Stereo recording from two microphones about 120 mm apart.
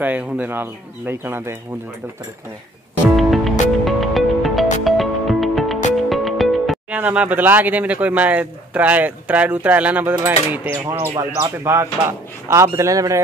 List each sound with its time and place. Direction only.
0.0 s speech: 15° right (ahead or behind)
3.2 s music: centre (ahead or behind)
6.9 s speech: 10° right (ahead or behind)
10.8 s speech: 25° right (ahead or behind)